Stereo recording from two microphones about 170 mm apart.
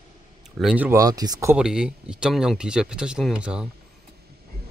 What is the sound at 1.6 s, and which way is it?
Speech, 5° right (ahead or behind).